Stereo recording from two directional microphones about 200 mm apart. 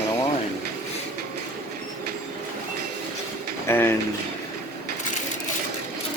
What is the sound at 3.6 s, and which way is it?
Speech, 10° left (ahead or behind).